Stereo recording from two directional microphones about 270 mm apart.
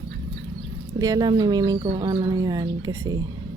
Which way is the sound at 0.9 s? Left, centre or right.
Centre.